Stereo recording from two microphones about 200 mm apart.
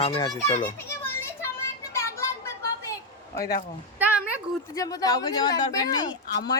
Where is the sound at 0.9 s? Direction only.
15° left (ahead or behind).